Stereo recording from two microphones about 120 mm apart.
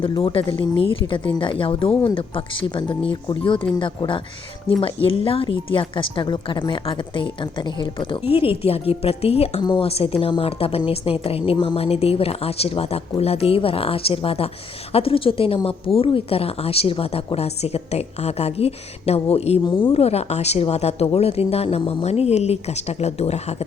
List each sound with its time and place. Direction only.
0.0 s a woman's voice: 45° left (ahead or behind)
19.9 s a woman's voice: 60° left (ahead or behind)